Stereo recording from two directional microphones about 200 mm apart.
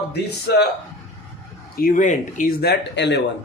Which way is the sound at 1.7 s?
45° left (ahead or behind).